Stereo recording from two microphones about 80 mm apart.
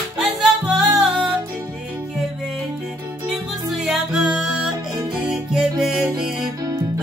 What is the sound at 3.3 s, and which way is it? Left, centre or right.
Music, centre.